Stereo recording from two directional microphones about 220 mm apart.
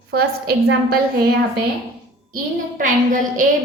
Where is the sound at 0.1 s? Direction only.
45° right (ahead or behind).